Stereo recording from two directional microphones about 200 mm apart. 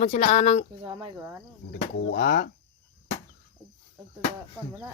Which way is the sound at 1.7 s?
50° left (ahead or behind).